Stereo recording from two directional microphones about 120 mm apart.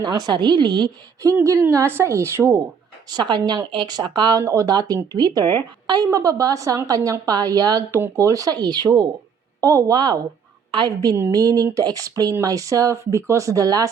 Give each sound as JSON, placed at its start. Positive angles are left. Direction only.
{"t": 0.0, "sound": "speech", "side_deg": -35}
{"t": 1.2, "sound": "a woman's voice", "side_deg": -25}
{"t": 3.1, "sound": "a woman's voice", "side_deg": -35}